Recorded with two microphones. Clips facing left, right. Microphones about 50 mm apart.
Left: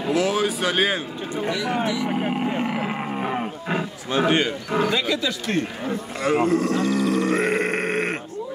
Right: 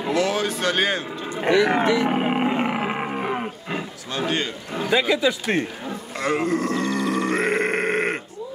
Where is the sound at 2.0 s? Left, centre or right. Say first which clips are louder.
Right 3 dB; right; by 3.5 s centre.